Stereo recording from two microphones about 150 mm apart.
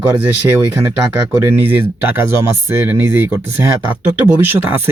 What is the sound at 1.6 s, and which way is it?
Speech, 15° right (ahead or behind).